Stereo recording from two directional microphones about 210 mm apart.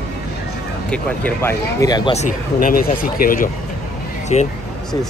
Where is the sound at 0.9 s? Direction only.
5° left (ahead or behind).